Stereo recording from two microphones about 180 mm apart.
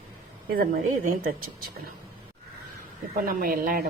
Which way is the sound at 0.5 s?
55° right (ahead or behind).